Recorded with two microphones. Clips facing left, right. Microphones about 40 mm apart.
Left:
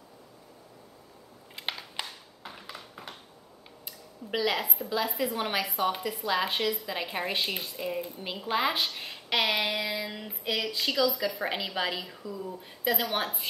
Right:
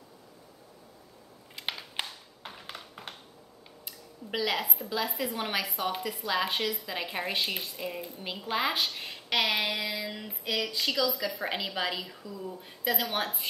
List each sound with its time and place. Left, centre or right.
1.5 s crushing: centre
2.7 s a sound: right
3.8 s a woman's voice: centre